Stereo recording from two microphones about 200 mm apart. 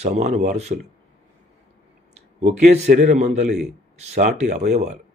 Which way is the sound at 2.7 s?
35° right (ahead or behind).